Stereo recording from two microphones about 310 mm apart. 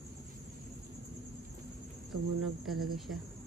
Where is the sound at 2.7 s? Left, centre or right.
Centre.